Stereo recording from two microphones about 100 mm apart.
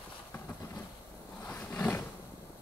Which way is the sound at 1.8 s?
20° left (ahead or behind).